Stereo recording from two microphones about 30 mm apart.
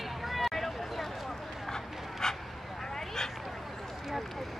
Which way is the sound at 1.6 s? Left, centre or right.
Centre.